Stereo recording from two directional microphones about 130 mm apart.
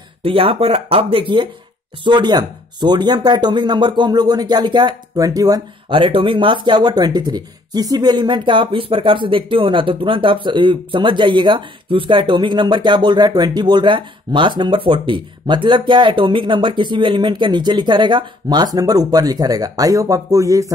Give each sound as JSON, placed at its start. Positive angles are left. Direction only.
{"t": 0.2, "sound": "speech", "side_deg": -45}
{"t": 5.9, "sound": "speech", "side_deg": -40}